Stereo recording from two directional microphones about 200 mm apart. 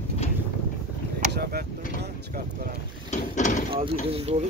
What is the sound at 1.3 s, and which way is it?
Vehicle, 50° right (ahead or behind).